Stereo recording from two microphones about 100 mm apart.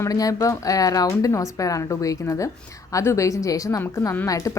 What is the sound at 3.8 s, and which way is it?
Speech, 20° left (ahead or behind).